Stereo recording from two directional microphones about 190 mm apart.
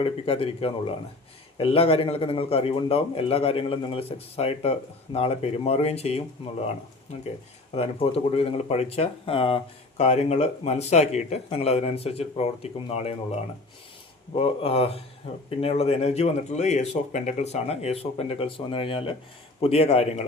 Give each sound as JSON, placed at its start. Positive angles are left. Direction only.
{"t": 0.0, "sound": "a man's voice", "side_deg": 30}
{"t": 7.7, "sound": "a man's voice", "side_deg": 30}